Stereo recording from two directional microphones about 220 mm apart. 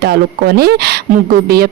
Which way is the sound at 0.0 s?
45° right (ahead or behind).